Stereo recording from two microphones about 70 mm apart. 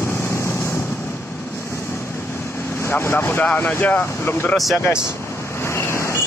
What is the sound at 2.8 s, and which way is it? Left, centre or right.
Speech, left.